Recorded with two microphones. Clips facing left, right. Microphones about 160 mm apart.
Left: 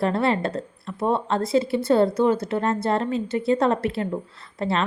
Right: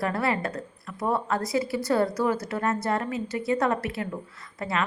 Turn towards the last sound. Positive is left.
turn(degrees=30)  # may be behind; listen again after turning